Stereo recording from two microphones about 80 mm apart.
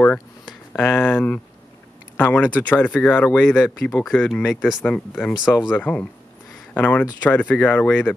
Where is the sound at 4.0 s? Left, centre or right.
Centre.